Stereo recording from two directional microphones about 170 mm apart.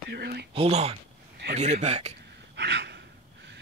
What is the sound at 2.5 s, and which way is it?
Gasp, 90° right.